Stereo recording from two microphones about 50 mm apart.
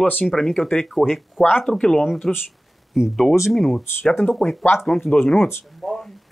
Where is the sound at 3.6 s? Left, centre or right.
Centre.